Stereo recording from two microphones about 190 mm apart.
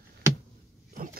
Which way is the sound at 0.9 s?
50° right (ahead or behind).